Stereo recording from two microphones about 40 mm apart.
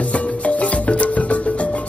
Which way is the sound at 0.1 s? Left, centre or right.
Left.